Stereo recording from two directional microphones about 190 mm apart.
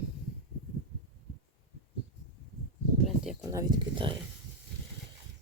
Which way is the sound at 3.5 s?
20° right (ahead or behind).